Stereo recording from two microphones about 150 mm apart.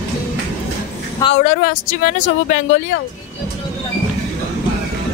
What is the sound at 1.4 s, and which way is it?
Speech, 60° left (ahead or behind).